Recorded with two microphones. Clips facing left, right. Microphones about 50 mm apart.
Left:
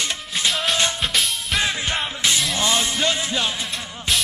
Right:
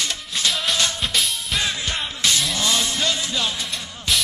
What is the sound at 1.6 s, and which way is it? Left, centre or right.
Music, left.